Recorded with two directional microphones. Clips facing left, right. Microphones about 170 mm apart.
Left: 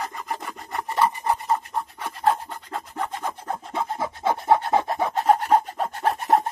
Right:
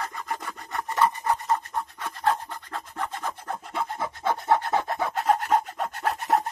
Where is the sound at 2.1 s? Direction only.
30° left (ahead or behind).